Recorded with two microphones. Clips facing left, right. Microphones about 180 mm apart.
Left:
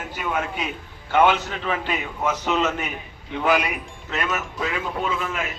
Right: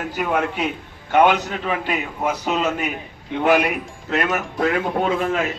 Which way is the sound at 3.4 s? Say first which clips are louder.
Right 4 dB; 60° right (ahead or behind).